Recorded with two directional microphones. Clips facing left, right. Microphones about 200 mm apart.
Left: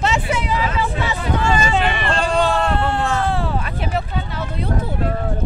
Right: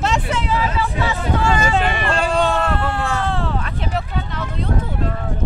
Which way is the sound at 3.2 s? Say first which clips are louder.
Left 1 dB; 10° left (ahead or behind).